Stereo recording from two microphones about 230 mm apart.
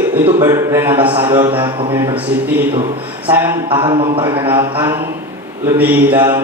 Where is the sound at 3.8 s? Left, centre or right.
Right.